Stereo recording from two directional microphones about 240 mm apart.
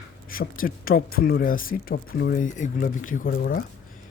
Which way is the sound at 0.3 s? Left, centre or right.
Left.